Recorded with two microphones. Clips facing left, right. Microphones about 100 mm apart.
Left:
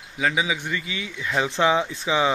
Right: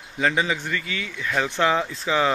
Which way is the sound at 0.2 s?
5° left (ahead or behind).